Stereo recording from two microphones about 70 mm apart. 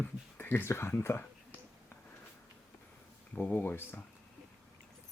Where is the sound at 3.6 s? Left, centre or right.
Left.